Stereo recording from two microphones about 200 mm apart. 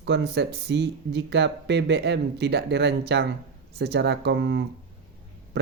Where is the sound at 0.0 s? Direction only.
60° right (ahead or behind).